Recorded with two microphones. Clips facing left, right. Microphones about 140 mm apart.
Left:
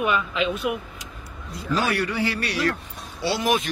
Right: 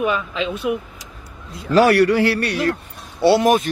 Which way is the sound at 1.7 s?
80° right.